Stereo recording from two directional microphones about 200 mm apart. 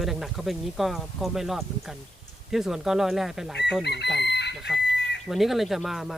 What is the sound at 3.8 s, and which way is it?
Chicken, 55° left (ahead or behind).